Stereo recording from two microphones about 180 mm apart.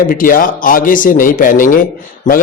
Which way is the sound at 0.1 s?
50° left (ahead or behind).